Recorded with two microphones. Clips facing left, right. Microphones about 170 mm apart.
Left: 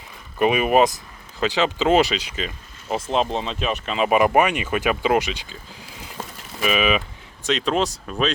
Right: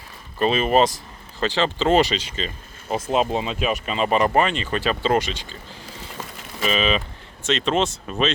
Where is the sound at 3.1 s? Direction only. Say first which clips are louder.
Right 2 dB; 5° right (ahead or behind).